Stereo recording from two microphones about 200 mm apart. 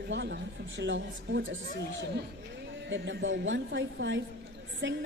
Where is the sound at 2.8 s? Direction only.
65° right (ahead or behind).